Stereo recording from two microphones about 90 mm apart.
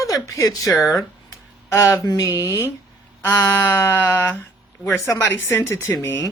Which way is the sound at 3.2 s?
35° left (ahead or behind).